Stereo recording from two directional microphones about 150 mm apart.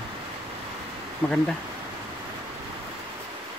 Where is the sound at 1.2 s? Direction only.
5° left (ahead or behind).